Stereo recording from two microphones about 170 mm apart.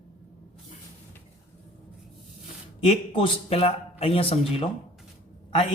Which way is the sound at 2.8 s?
30° left (ahead or behind).